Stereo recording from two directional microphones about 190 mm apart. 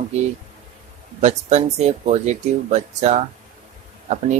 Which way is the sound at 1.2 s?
35° right (ahead or behind).